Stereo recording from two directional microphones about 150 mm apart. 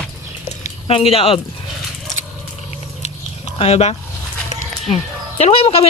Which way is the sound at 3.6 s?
45° left (ahead or behind).